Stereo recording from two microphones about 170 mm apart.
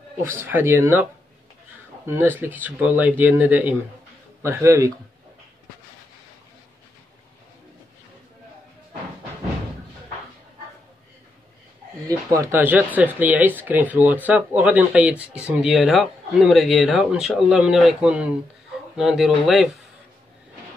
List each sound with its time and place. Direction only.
0.3 s speech: 10° right (ahead or behind)
2.0 s speech: 15° right (ahead or behind)
12.1 s speech: 20° right (ahead or behind); by 19.7 s centre (ahead or behind)